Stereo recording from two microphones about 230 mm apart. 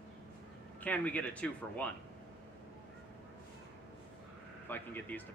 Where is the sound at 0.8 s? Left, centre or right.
Centre.